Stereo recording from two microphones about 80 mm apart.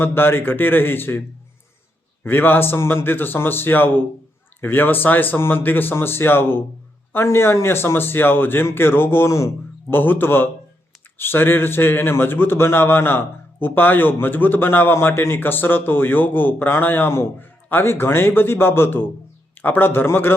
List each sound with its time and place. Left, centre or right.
0.0 s a man's voice: left
2.2 s a man's voice: left
9.9 s a man's voice: left